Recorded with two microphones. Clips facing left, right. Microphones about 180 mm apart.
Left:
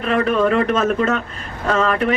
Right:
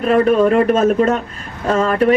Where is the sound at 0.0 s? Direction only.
40° right (ahead or behind).